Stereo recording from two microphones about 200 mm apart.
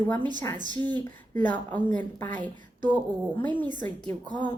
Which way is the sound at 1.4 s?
10° left (ahead or behind).